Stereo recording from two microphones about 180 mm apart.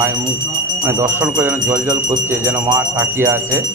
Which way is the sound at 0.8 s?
10° right (ahead or behind).